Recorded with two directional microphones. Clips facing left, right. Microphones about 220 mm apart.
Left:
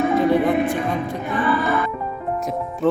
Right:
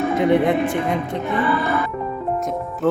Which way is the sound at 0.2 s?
20° right (ahead or behind).